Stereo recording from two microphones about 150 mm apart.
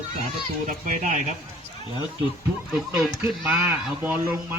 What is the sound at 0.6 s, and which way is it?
Speech, 60° right (ahead or behind).